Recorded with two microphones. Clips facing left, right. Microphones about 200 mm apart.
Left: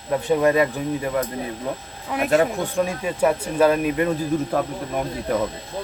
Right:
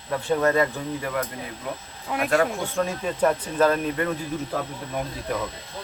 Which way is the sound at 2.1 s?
Centre (ahead or behind).